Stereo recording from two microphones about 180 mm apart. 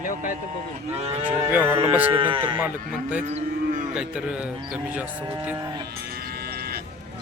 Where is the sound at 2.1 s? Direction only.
30° right (ahead or behind).